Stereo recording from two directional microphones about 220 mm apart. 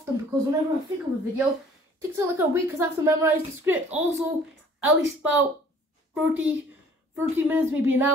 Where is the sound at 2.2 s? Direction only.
10° right (ahead or behind).